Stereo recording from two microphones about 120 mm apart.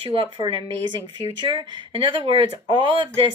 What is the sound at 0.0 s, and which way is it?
Speech, 50° right (ahead or behind).